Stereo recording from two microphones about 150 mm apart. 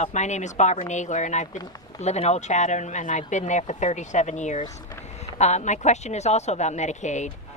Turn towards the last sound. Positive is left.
turn(degrees=50)  # may be behind; listen again after turning